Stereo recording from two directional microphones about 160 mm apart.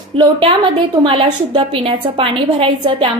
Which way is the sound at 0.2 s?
30° right (ahead or behind).